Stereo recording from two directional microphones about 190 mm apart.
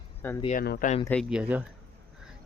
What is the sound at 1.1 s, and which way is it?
Speech, centre (ahead or behind).